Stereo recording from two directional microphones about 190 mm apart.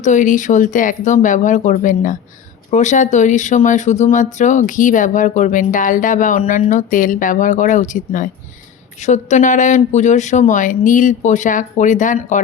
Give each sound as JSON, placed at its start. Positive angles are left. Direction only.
{"t": 0.0, "sound": "speech", "side_deg": 40}